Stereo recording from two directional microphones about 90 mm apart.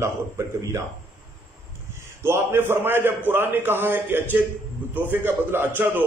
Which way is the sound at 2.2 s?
25° right (ahead or behind).